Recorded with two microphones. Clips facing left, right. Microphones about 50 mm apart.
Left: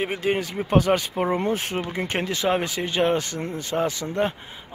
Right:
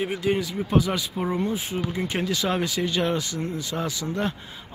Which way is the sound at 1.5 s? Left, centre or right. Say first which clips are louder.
Left 2 dB; left.